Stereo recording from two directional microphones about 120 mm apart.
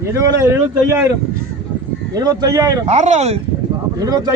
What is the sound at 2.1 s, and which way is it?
Speech, 30° right (ahead or behind).